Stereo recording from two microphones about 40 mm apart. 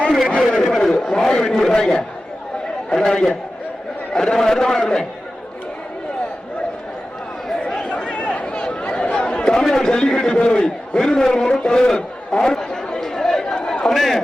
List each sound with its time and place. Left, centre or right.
0.4 s a man's voice: centre
1.1 s a man's voice: left
7.6 s a sound: left
9.6 s a sound: centre
13.6 s chatter: left
13.9 s a man's voice: centre